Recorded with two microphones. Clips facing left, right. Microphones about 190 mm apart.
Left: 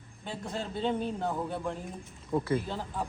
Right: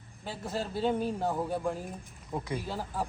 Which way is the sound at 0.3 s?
5° right (ahead or behind).